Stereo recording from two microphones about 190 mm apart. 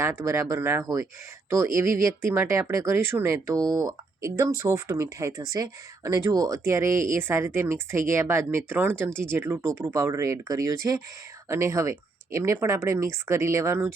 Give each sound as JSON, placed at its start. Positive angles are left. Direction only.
{"t": 0.0, "sound": "speech", "side_deg": -15}